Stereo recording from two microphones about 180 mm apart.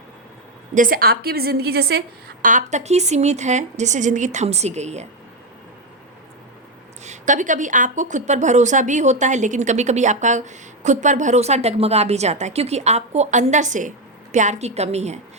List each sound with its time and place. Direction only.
0.7 s a woman's voice: 50° right (ahead or behind)
7.0 s speech: 40° right (ahead or behind)